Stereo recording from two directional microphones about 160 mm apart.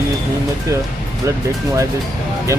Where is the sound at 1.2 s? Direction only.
20° right (ahead or behind).